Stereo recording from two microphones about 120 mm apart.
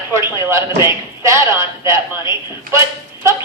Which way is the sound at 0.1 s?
20° right (ahead or behind).